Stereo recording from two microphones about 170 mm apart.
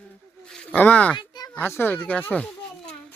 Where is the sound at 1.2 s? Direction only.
25° left (ahead or behind).